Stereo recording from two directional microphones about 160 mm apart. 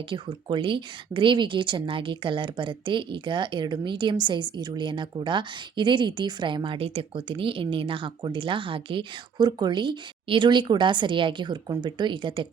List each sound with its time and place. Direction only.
0.1 s speech: 30° right (ahead or behind)